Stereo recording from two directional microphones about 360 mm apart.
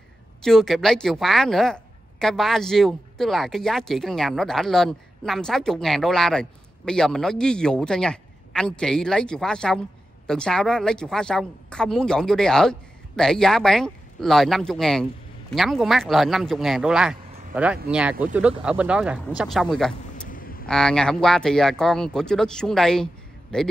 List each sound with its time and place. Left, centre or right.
0.4 s a woman's voice: centre
20.2 s vehicle: left
20.6 s a woman's voice: centre